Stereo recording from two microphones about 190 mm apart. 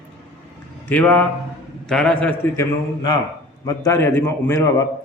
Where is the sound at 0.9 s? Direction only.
10° left (ahead or behind).